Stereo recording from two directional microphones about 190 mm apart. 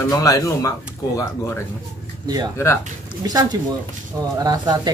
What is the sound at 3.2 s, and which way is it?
Speech, 20° right (ahead or behind).